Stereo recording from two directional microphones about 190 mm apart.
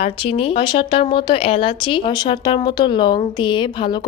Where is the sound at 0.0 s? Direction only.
30° left (ahead or behind).